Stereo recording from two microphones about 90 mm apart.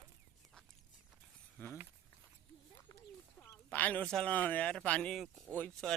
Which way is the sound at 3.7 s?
15° left (ahead or behind).